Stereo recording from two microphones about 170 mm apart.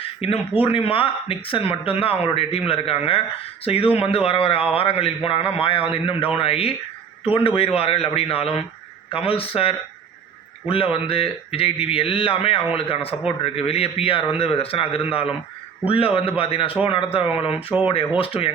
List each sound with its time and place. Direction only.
0.0 s speech: 35° left (ahead or behind)